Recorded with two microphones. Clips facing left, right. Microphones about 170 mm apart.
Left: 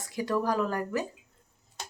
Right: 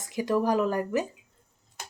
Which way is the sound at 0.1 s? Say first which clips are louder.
Right 3 dB; 20° right (ahead or behind).